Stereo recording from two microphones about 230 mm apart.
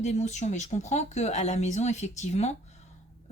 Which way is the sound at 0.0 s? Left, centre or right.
Left.